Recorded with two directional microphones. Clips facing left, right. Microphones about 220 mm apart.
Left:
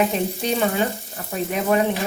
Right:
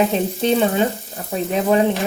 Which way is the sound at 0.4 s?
25° right (ahead or behind).